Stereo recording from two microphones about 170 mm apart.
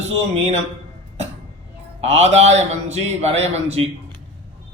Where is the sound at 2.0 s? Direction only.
40° right (ahead or behind).